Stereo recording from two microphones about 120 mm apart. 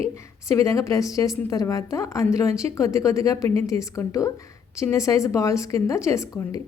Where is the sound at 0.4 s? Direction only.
25° left (ahead or behind).